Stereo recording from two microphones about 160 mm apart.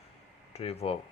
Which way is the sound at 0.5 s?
40° left (ahead or behind).